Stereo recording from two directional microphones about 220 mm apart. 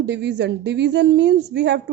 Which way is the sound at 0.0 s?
50° right (ahead or behind).